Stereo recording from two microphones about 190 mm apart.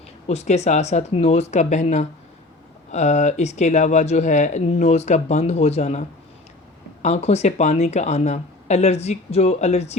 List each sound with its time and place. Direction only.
0.3 s speech: 35° left (ahead or behind)